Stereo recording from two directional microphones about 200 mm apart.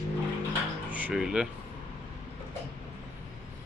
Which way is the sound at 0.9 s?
5° right (ahead or behind).